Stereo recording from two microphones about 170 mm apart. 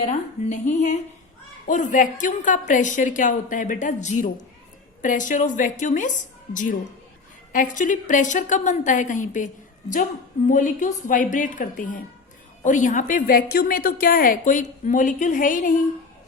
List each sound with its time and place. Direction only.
0.0 s a woman's voice: 45° left (ahead or behind)